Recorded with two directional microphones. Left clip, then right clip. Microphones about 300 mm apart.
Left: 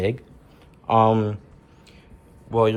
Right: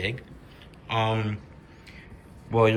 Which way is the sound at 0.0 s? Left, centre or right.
Centre.